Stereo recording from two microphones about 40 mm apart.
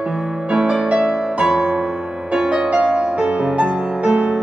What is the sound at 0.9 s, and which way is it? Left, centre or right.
Music, centre.